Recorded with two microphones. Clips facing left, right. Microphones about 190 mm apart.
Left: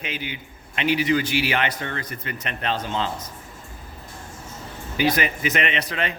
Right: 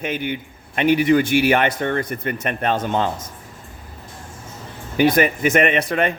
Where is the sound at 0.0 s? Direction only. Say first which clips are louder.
Right 8 dB; 55° right (ahead or behind).